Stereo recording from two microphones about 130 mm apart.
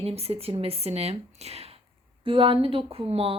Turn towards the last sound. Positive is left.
turn(degrees=-50)  # may be behind; listen again after turning